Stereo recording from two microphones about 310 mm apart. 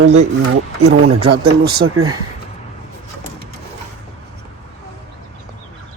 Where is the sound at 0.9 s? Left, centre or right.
Right.